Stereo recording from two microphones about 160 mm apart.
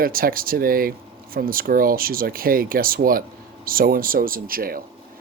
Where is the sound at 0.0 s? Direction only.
65° right (ahead or behind).